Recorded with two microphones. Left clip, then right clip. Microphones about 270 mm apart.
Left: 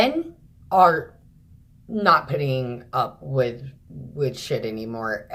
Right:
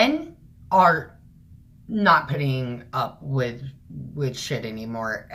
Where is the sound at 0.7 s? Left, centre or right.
Centre.